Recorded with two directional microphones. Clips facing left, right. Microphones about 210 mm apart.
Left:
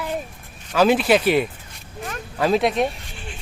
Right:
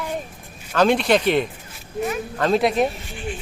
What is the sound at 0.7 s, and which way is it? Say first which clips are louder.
Speech: left 1 dB; 5° left (ahead or behind).